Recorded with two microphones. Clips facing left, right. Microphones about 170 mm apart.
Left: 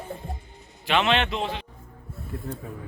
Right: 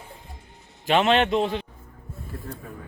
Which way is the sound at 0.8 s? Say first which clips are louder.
Right 3 dB; 45° right (ahead or behind).